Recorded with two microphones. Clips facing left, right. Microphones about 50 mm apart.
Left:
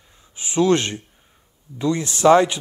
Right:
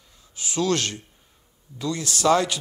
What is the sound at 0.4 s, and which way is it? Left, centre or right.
Speech, left.